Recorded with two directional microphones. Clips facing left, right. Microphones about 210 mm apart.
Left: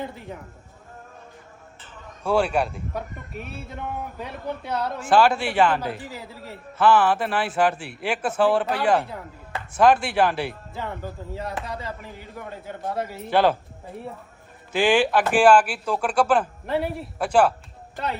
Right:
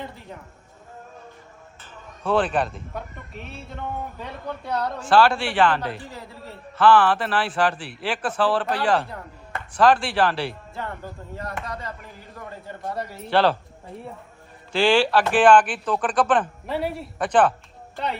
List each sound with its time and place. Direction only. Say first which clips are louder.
2.2 s speech: even; 10° left (ahead or behind)
4.6 s a man's voice: right 3 dB; centre (ahead or behind)
8.2 s speech: left 2 dB; 25° left (ahead or behind)
8.6 s a man's voice: left 1 dB; 5° left (ahead or behind)
13.2 s speech: even; 15° left (ahead or behind)
14.8 s speech: right 1 dB; 15° left (ahead or behind)
15.2 s speech: even; 5° left (ahead or behind)